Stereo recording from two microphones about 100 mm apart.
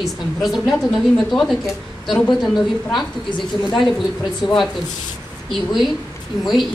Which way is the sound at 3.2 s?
50° left (ahead or behind).